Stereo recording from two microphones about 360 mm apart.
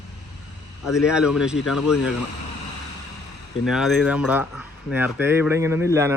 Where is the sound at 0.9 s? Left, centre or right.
Centre.